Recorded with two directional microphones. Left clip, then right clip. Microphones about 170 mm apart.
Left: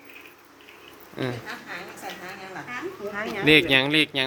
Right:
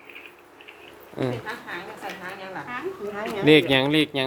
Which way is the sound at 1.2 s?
20° right (ahead or behind).